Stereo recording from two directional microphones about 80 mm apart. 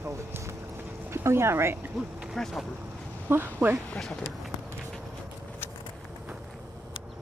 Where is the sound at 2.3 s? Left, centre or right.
Centre.